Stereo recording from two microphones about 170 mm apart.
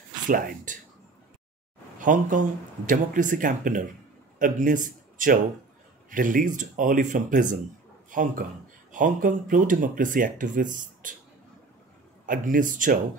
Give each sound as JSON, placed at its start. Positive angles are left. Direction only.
{"t": 0.3, "sound": "speech", "side_deg": -55}
{"t": 2.0, "sound": "speech", "side_deg": -50}
{"t": 12.3, "sound": "speech", "side_deg": -50}